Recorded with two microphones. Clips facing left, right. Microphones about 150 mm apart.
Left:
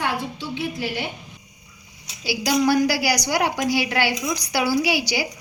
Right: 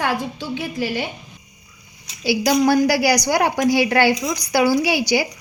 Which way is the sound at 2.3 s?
50° right (ahead or behind).